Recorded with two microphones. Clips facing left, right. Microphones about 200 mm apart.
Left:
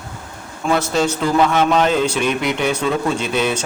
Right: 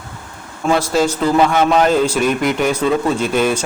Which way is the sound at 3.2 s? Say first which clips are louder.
Right 3 dB; 45° right (ahead or behind).